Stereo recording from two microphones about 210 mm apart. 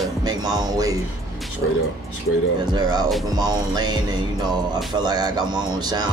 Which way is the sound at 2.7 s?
20° right (ahead or behind).